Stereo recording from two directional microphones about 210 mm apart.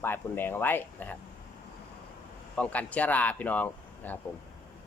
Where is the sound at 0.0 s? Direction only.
10° left (ahead or behind).